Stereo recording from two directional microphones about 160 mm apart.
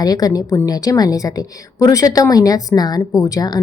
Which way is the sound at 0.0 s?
25° left (ahead or behind).